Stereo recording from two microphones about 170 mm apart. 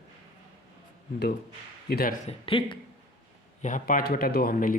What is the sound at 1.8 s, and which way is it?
Speech, 65° left (ahead or behind).